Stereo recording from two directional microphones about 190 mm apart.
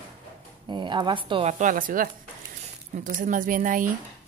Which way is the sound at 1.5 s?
40° right (ahead or behind).